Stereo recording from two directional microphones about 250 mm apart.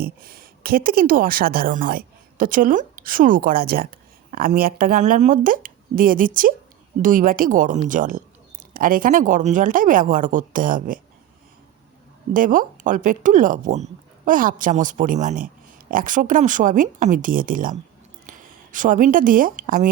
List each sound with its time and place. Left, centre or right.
0.0 s speech: right
12.3 s speech: right